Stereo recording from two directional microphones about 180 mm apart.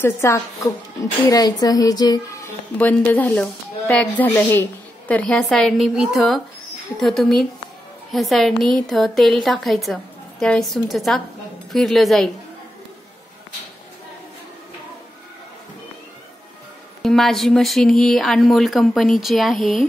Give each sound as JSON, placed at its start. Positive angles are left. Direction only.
{"t": 0.0, "sound": "speech", "side_deg": 15}
{"t": 17.0, "sound": "speech", "side_deg": 0}